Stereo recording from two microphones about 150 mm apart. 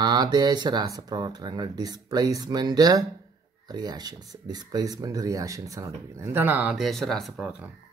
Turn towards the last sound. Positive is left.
turn(degrees=-5)  # may be behind; listen again after turning